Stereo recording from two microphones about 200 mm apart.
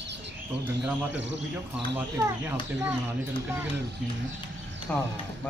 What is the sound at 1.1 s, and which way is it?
Speech, 60° right (ahead or behind).